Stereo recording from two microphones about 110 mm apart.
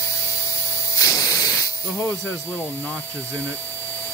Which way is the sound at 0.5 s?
30° left (ahead or behind).